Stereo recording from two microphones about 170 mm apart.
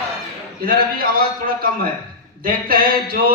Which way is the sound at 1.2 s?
60° right (ahead or behind).